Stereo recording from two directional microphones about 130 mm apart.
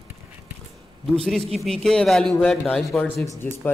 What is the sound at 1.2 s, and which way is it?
A man's voice, centre (ahead or behind).